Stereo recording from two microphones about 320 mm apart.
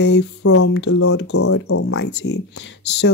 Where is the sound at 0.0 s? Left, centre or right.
Left.